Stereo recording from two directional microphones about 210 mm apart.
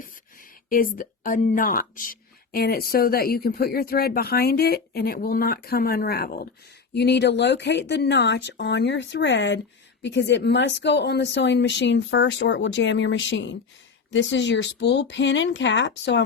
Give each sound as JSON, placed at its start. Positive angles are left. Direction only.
{"t": 0.7, "sound": "speech", "side_deg": 40}